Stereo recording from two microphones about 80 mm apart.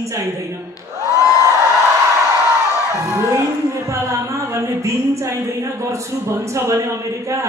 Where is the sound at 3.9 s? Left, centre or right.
Right.